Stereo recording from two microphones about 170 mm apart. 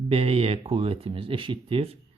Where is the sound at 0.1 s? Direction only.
35° right (ahead or behind).